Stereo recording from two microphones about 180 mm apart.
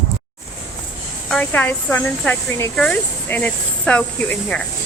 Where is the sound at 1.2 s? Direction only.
5° left (ahead or behind).